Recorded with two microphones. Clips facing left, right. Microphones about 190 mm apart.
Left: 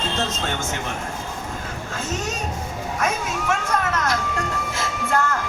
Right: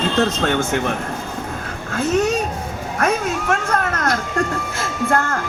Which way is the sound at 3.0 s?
55° right (ahead or behind).